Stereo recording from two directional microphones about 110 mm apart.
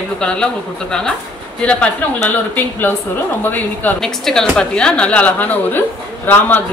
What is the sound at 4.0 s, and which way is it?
A woman's voice, 5° left (ahead or behind).